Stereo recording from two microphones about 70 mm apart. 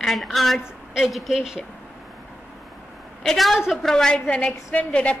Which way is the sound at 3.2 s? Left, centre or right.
Centre.